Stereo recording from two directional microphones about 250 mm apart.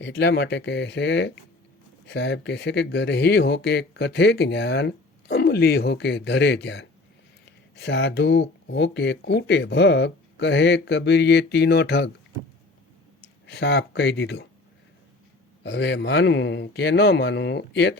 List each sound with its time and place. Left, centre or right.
0.0 s speech: left
13.5 s speech: left
15.6 s speech: left